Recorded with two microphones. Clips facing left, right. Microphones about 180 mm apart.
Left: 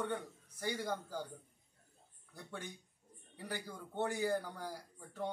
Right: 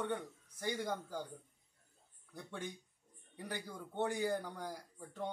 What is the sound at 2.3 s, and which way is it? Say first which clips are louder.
Speech: right 2 dB; 5° left (ahead or behind).